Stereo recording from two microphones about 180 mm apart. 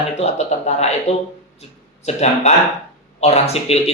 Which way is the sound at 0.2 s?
40° left (ahead or behind).